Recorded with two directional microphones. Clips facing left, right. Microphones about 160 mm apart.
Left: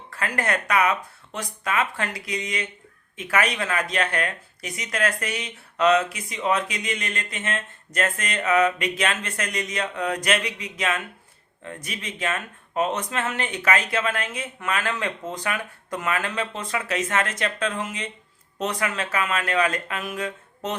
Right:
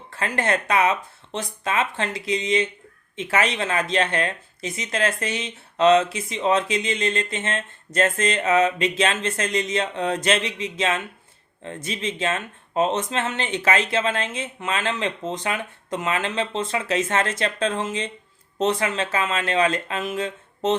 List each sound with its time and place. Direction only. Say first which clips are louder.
0.1 s speech: right 2 dB; 25° right (ahead or behind)